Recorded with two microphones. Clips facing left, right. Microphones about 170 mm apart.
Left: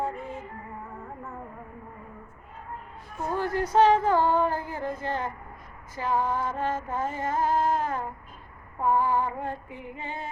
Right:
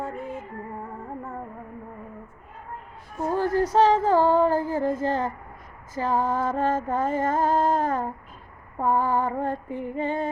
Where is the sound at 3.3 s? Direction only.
40° right (ahead or behind).